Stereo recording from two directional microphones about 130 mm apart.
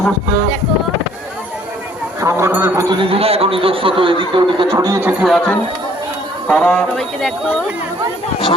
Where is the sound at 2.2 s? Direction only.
20° right (ahead or behind).